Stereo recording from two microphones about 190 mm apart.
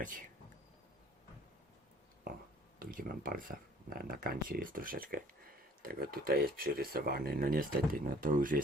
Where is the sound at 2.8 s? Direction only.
45° right (ahead or behind).